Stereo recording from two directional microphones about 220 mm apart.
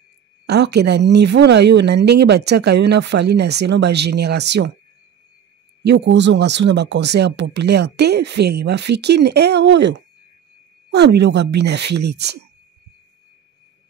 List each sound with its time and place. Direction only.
0.5 s speech: 50° right (ahead or behind)
5.9 s speech: 55° right (ahead or behind)